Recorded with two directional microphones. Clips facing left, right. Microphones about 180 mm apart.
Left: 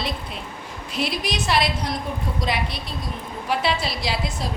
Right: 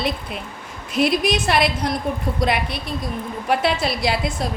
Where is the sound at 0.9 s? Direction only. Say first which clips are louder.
Right 7 dB; 50° right (ahead or behind).